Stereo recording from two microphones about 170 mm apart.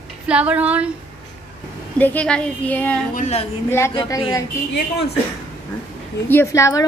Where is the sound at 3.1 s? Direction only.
40° left (ahead or behind).